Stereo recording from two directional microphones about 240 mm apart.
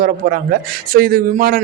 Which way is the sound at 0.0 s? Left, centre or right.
Right.